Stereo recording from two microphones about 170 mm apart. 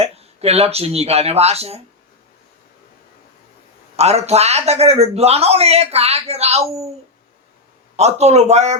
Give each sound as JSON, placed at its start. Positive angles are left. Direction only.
{"t": 0.0, "sound": "speech", "side_deg": -40}
{"t": 3.9, "sound": "a man's voice", "side_deg": -40}
{"t": 7.9, "sound": "a man's voice", "side_deg": -40}